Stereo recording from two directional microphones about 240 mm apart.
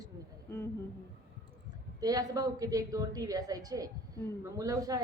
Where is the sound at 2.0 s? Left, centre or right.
Centre.